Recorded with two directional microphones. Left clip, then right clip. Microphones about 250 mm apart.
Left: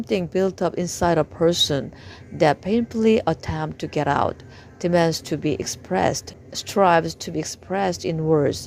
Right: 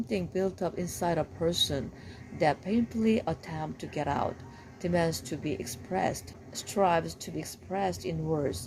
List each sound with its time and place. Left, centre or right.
0.0 s speech: left